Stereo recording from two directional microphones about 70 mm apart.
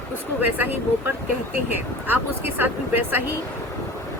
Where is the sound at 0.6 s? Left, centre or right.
Right.